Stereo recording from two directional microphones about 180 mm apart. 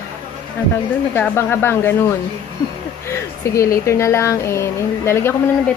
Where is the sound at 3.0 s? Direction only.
15° left (ahead or behind).